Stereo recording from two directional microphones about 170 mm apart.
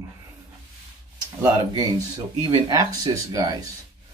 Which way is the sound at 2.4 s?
25° right (ahead or behind).